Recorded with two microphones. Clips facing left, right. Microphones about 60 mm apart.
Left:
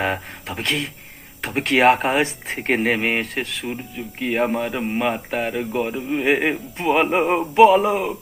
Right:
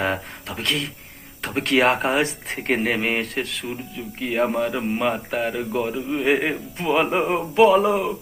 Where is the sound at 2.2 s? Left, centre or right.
Centre.